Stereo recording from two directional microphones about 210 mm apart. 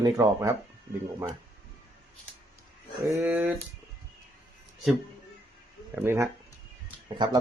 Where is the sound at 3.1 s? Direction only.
10° right (ahead or behind).